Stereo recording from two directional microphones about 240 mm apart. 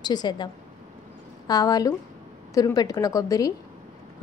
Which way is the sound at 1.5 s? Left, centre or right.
Centre.